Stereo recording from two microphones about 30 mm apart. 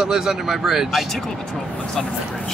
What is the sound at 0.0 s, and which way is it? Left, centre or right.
Speech, centre.